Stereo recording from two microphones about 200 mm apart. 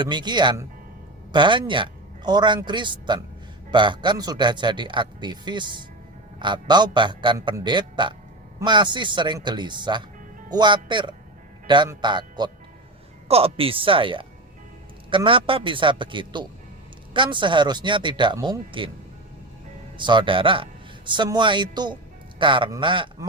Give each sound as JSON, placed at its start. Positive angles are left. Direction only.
{"t": 0.0, "sound": "a man's voice", "side_deg": -20}
{"t": 20.0, "sound": "a man's voice", "side_deg": -25}